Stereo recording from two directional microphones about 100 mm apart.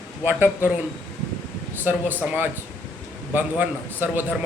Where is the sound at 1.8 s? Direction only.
20° right (ahead or behind).